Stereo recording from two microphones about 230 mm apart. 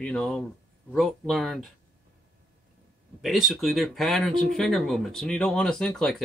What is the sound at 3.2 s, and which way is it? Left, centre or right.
Speech, centre.